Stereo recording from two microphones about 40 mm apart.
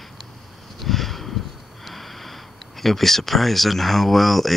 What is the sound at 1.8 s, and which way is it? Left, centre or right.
Speech, centre.